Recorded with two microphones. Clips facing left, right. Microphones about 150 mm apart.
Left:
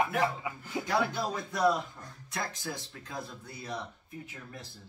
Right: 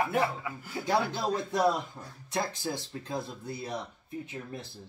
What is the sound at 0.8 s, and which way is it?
Speech, 25° right (ahead or behind).